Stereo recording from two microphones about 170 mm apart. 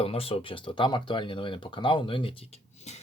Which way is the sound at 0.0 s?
35° left (ahead or behind).